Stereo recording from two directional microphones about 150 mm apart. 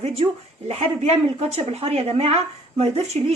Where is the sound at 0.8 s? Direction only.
45° right (ahead or behind).